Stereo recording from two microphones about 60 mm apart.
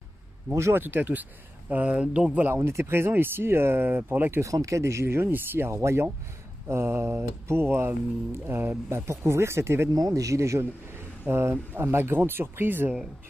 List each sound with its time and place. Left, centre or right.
0.5 s speech: right; by 2.2 s centre
2.5 s speech: right
4.4 s speech: right
5.7 s speech: right
9.9 s speech: right
11.2 s speech: right